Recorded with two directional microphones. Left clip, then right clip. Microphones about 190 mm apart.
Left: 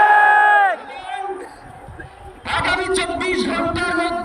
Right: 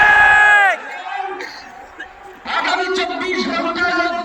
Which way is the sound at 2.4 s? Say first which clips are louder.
Right 1 dB; 25° left (ahead or behind).